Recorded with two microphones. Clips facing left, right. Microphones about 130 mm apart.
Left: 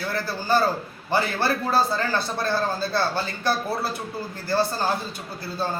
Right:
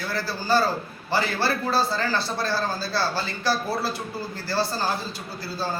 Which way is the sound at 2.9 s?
20° left (ahead or behind).